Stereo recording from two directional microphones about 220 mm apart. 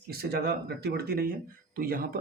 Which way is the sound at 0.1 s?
45° right (ahead or behind).